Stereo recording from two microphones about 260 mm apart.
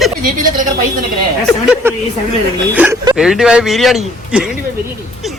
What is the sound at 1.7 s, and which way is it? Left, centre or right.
Speech, centre.